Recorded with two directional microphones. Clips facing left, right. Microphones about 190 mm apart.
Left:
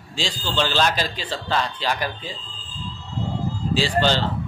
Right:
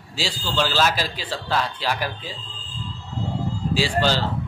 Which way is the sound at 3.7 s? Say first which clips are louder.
Left 1 dB; 10° right (ahead or behind).